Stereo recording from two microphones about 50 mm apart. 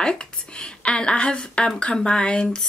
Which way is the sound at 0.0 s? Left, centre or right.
Centre.